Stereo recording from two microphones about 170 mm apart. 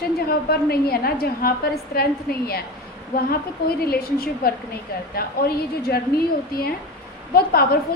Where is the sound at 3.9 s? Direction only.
60° left (ahead or behind).